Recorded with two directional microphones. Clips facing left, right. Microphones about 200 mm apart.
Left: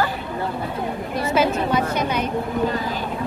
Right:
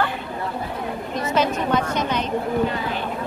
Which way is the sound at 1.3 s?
10° left (ahead or behind).